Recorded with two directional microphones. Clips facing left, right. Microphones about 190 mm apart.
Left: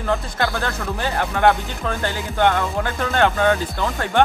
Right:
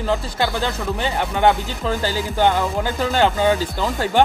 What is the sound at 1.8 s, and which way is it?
Speech, 30° right (ahead or behind).